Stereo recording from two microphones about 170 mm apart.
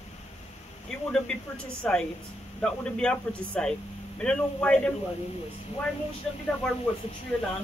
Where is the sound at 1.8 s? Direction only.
5° left (ahead or behind).